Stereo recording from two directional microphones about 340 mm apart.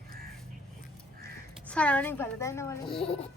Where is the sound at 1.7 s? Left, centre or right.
Centre.